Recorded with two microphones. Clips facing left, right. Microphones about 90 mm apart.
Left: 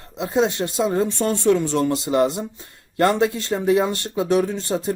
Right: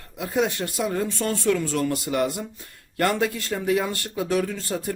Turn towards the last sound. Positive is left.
turn(degrees=25)  # may be behind; listen again after turning